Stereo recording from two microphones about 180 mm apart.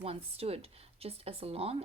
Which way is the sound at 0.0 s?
35° right (ahead or behind).